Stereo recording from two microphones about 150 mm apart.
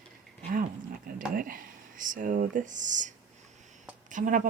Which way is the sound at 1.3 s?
70° right (ahead or behind).